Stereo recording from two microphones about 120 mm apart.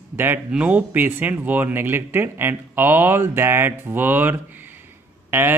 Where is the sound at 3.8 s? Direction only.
15° right (ahead or behind).